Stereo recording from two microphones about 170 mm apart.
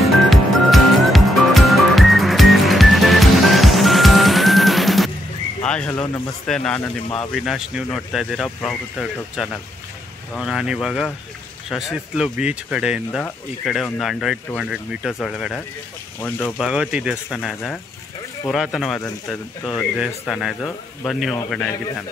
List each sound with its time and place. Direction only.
0.0 s music: centre (ahead or behind)
5.6 s speech: 5° left (ahead or behind)
7.3 s speech: centre (ahead or behind)
16.6 s speech: 5° right (ahead or behind)